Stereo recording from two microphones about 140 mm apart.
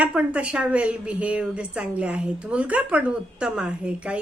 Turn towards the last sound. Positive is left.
turn(degrees=-10)  # may be behind; listen again after turning